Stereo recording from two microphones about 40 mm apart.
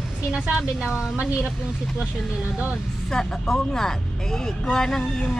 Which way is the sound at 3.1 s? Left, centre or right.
Centre.